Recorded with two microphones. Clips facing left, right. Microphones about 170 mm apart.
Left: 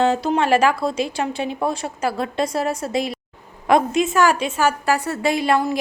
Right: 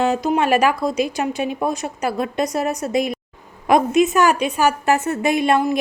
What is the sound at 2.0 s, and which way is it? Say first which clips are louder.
Speech: right 1 dB; 20° right (ahead or behind).